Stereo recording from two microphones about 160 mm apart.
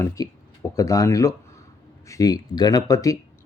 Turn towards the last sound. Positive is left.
turn(degrees=20)  # may be behind; listen again after turning